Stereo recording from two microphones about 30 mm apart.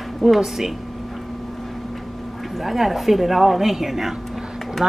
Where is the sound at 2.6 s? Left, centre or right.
Centre.